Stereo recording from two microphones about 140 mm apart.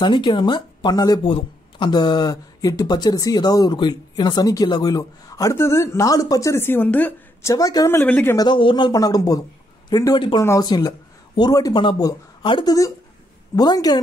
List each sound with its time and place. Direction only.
0.0 s speech: 35° left (ahead or behind); by 7.5 s 10° left (ahead or behind)
7.5 s speech: 25° left (ahead or behind)
8.4 s speech: 35° left (ahead or behind)